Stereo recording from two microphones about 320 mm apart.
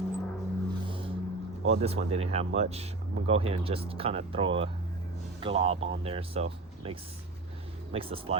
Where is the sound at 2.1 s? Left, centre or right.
Centre.